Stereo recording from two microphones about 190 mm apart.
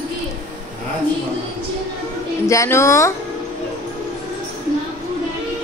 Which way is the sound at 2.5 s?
15° left (ahead or behind).